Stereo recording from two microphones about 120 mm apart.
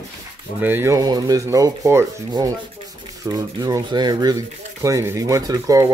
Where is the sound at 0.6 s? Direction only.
20° right (ahead or behind).